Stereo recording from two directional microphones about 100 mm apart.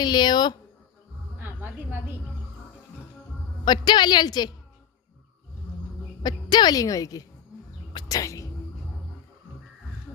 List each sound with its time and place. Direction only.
0.0 s speech: 45° left (ahead or behind)
3.6 s a woman's voice: 45° left (ahead or behind)
6.2 s a woman's voice: 45° left (ahead or behind)
7.9 s a sound: 40° left (ahead or behind)